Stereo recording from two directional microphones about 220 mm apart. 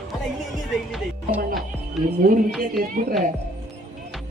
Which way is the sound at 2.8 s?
40° right (ahead or behind).